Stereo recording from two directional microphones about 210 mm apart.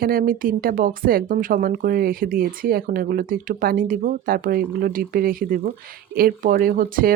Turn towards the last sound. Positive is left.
turn(degrees=-45)  # may be behind; listen again after turning